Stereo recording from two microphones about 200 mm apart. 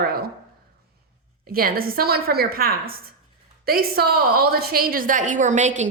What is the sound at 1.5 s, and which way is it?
A woman's voice, 45° right (ahead or behind).